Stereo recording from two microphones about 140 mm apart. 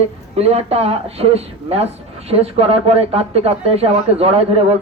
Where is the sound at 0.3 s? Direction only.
45° right (ahead or behind).